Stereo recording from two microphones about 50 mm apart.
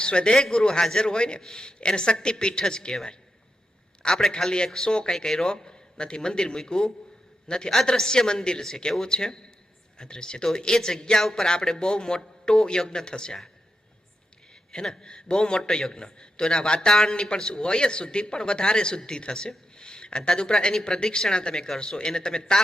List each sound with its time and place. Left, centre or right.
0.0 s a man's voice: centre
4.0 s a man's voice: centre
14.5 s a man's voice: centre